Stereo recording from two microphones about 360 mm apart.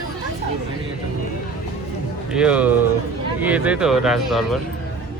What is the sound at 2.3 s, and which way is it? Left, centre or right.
Speech, centre.